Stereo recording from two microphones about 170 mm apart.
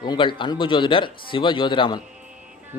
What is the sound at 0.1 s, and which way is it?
Speech, 30° left (ahead or behind).